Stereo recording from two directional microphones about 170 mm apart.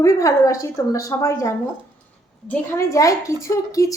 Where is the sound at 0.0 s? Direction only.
20° left (ahead or behind).